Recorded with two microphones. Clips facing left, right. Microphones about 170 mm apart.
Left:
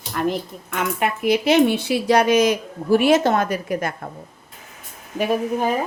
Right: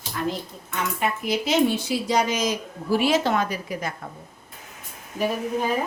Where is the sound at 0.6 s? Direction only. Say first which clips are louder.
Left 3 dB; 60° left (ahead or behind).